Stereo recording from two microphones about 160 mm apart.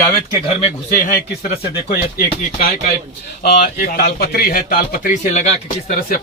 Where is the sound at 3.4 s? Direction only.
85° left; by 5.1 s 70° left (ahead or behind).